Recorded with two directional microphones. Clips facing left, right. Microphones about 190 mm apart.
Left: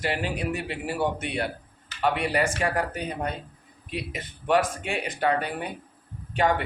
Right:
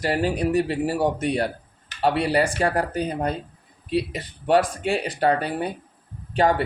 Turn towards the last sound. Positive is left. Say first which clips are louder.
# right 4 dB
turn(degrees=-35)  # may be behind; listen again after turning